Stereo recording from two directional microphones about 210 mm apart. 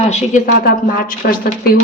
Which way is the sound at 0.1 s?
40° left (ahead or behind).